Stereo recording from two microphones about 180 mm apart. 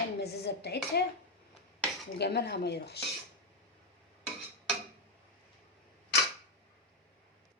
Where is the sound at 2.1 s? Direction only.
65° left (ahead or behind).